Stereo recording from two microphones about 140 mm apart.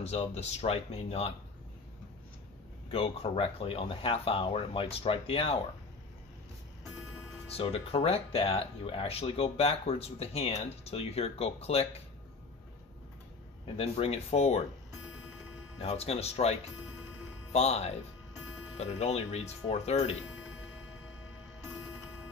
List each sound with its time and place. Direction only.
0.0 s speech: 50° left (ahead or behind)
2.9 s speech: 45° left (ahead or behind)
7.5 s speech: 45° left (ahead or behind)
13.7 s speech: 45° left (ahead or behind)
15.8 s speech: 50° left (ahead or behind)